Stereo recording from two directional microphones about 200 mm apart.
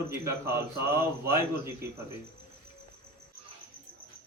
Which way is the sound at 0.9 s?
15° right (ahead or behind).